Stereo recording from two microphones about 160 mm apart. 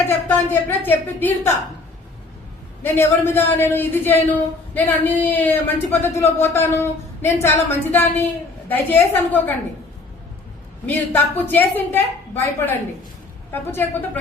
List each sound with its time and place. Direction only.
0.3 s a man's voice: 10° left (ahead or behind)
2.8 s a man's voice: 15° left (ahead or behind)
10.8 s a man's voice: 10° left (ahead or behind)